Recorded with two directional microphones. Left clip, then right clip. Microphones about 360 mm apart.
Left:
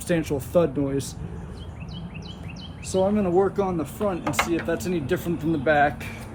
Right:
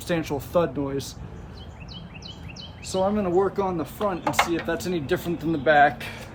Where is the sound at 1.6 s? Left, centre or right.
Centre.